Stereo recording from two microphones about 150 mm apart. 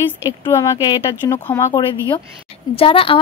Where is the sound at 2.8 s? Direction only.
35° left (ahead or behind).